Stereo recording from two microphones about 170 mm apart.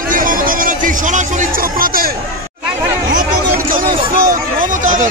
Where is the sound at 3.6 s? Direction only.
55° right (ahead or behind).